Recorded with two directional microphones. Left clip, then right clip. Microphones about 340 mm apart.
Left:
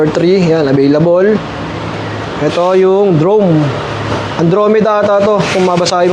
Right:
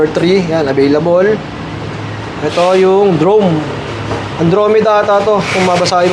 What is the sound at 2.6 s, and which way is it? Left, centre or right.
Speech, left.